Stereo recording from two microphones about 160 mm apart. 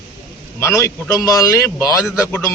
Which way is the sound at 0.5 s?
15° left (ahead or behind).